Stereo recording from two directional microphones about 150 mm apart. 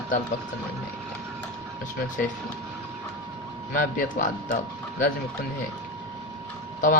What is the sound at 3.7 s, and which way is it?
Speech, 65° left (ahead or behind).